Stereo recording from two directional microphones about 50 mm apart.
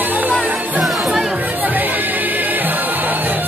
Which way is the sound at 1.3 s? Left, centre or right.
Right.